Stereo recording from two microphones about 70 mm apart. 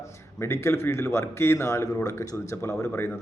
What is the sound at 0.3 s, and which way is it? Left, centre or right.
Speech, left.